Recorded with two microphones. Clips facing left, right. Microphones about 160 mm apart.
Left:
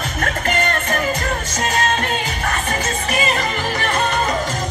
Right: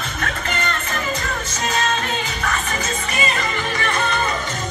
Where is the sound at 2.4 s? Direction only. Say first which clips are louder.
Left 2 dB; 40° left (ahead or behind).